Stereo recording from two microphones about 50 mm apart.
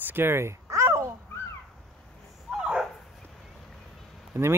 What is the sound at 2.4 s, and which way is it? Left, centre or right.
Dog, centre.